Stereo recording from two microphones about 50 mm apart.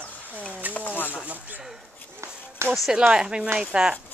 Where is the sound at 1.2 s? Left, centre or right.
Right.